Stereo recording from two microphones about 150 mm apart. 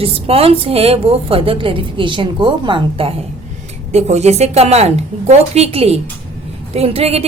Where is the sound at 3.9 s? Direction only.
45° right (ahead or behind).